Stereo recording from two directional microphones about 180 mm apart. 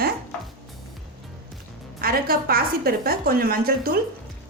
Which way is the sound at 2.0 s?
55° right (ahead or behind).